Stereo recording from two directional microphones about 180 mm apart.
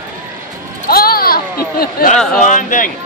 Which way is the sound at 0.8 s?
55° left (ahead or behind).